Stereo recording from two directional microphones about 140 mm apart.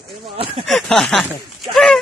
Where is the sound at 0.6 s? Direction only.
Centre (ahead or behind).